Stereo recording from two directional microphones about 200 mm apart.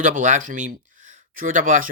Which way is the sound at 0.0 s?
40° right (ahead or behind).